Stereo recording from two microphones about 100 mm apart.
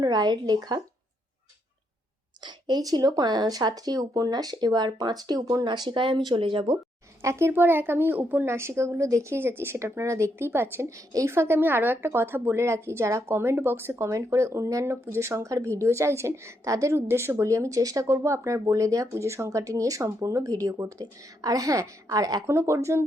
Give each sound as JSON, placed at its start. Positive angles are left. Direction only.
{"t": 0.0, "sound": "speech", "side_deg": -45}
{"t": 2.4, "sound": "speech", "side_deg": -45}
{"t": 7.2, "sound": "a woman's voice", "side_deg": -30}
{"t": 22.5, "sound": "a woman's voice", "side_deg": -30}